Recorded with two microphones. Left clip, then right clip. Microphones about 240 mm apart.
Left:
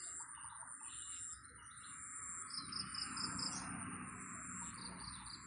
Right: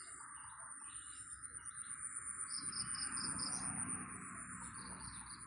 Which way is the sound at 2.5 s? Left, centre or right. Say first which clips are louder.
Left 1 dB; left.